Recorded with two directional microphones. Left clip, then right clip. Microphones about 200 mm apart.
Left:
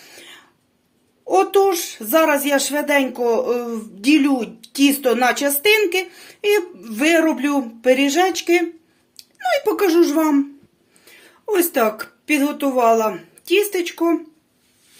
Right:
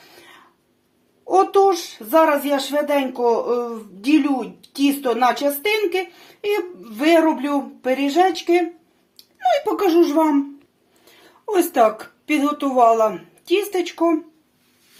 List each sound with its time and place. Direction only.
1.3 s a child's voice: 35° left (ahead or behind)
11.0 s speech: 10° left (ahead or behind)